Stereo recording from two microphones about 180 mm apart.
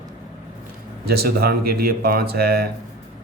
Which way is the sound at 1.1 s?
60° right (ahead or behind).